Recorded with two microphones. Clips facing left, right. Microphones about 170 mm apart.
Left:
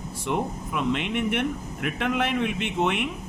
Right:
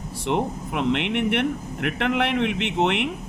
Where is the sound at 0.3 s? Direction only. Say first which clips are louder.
Right 3 dB; 70° right (ahead or behind).